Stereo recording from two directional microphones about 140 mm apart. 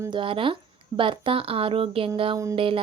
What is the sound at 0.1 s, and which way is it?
Speech, 35° right (ahead or behind).